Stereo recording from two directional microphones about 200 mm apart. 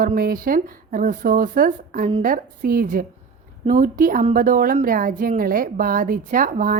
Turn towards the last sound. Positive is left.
turn(degrees=-45)  # may be behind; listen again after turning